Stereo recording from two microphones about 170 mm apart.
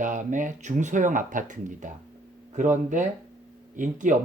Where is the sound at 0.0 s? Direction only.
45° right (ahead or behind).